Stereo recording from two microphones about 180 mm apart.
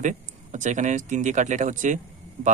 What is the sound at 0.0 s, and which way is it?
Speech, 45° right (ahead or behind).